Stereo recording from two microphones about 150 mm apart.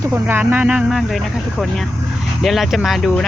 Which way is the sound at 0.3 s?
15° right (ahead or behind).